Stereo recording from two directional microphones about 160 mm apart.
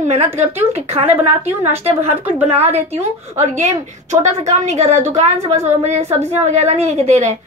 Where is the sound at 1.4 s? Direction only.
40° right (ahead or behind).